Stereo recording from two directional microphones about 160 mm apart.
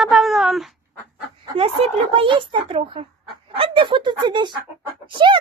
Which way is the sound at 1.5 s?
35° right (ahead or behind).